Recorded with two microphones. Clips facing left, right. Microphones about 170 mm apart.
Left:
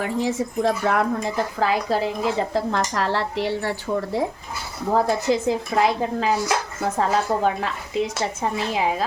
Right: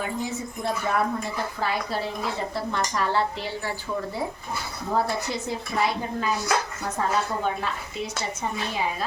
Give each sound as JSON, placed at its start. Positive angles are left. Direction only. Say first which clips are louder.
{"t": 0.0, "sound": "speech", "louder": "left 6 dB", "side_deg": 90}
{"t": 4.9, "sound": "speech", "louder": "left 6 dB", "side_deg": 90}